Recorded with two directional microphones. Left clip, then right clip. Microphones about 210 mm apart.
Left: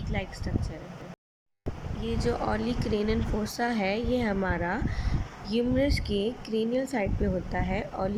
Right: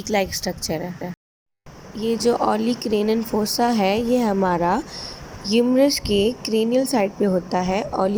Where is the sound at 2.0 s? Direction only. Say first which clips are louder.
Right 11 dB; 15° right (ahead or behind).